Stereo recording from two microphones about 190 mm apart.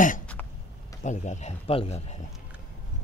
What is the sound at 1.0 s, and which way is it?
Speech, 40° left (ahead or behind).